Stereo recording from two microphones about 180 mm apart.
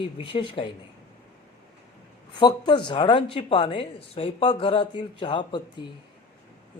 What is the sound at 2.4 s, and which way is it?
Speech, 25° left (ahead or behind).